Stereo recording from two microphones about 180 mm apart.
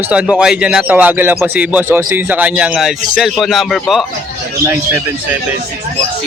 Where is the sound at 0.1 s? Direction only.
5° right (ahead or behind).